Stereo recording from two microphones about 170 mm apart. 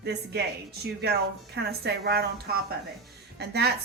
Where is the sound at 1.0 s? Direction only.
75° right (ahead or behind).